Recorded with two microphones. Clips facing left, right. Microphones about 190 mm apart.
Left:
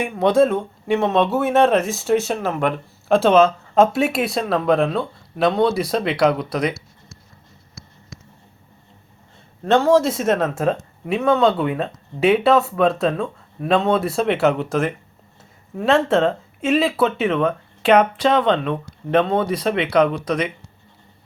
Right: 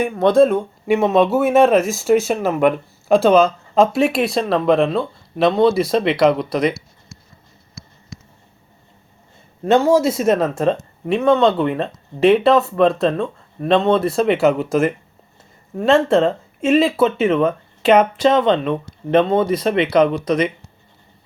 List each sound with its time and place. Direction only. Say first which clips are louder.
0.0 s speech: right 3 dB; 10° left (ahead or behind)
9.8 s speech: right 1 dB; centre (ahead or behind)